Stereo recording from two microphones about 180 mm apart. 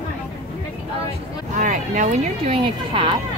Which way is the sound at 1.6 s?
45° right (ahead or behind).